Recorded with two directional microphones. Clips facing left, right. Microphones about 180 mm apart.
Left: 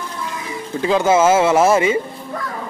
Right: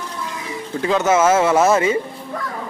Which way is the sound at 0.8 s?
30° left (ahead or behind).